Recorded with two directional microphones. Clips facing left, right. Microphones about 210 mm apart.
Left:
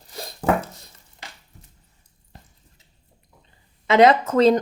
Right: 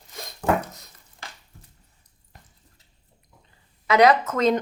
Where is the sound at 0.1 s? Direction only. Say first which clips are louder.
Left 2 dB; 35° left (ahead or behind).